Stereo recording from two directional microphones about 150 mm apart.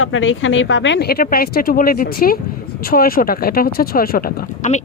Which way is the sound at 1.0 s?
90° left.